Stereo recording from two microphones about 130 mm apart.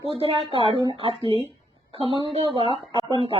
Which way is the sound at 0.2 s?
45° right (ahead or behind).